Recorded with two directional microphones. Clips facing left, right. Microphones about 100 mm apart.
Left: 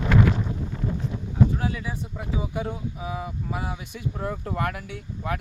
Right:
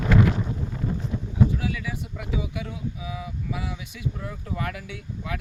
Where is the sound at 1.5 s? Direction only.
35° left (ahead or behind).